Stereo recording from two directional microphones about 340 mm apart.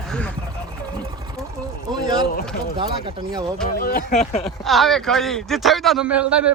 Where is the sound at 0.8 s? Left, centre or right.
Centre.